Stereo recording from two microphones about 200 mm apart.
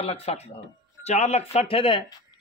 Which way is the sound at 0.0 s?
30° left (ahead or behind).